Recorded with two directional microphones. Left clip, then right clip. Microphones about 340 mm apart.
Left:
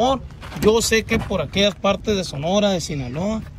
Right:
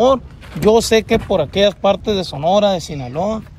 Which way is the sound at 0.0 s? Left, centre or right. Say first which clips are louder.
Right 6 dB; right.